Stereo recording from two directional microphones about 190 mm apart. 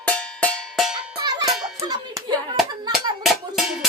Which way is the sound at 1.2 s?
20° right (ahead or behind).